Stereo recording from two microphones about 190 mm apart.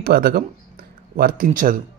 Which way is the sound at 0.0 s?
55° right (ahead or behind).